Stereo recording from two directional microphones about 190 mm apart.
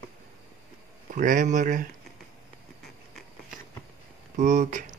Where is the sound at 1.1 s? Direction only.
45° right (ahead or behind).